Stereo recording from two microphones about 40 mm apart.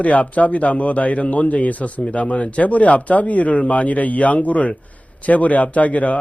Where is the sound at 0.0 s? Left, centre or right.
Left.